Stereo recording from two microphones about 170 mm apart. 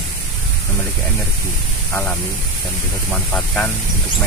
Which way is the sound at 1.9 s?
10° left (ahead or behind).